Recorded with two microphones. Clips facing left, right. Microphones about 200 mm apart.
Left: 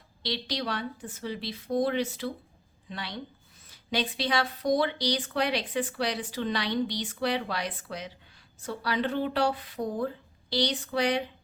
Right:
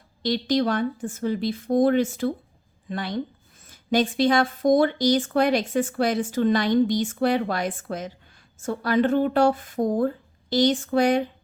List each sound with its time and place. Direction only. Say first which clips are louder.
0.2 s speech: right 11 dB; 50° right (ahead or behind)